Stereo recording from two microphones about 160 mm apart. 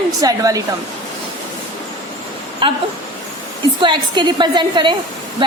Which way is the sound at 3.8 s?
30° right (ahead or behind).